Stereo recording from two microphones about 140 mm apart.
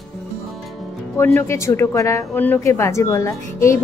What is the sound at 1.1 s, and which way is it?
Speech, 20° left (ahead or behind).